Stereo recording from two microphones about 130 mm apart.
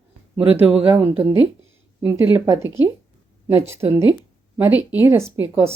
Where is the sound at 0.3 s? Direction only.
10° right (ahead or behind).